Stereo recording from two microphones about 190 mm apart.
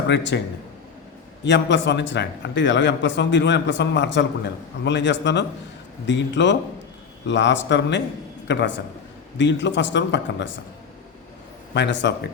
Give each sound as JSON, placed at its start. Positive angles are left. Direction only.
{"t": 0.1, "sound": "a man's voice", "side_deg": 70}
{"t": 1.5, "sound": "a man's voice", "side_deg": 65}
{"t": 11.7, "sound": "a man's voice", "side_deg": 65}